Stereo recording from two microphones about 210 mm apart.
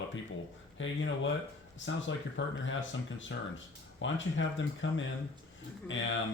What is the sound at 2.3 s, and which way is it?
Speech, 60° left (ahead or behind).